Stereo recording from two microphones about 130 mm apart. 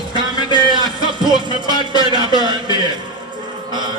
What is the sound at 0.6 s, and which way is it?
Speech, 35° right (ahead or behind).